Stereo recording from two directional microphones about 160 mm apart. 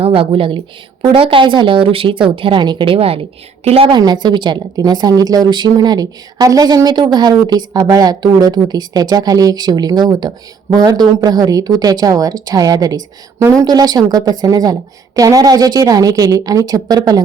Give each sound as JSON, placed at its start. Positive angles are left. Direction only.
{"t": 0.0, "sound": "a woman's voice", "side_deg": -35}